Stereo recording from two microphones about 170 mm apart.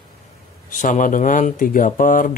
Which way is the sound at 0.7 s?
50° left (ahead or behind).